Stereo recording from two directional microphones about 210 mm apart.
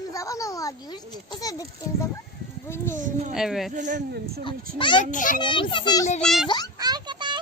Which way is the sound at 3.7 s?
35° right (ahead or behind).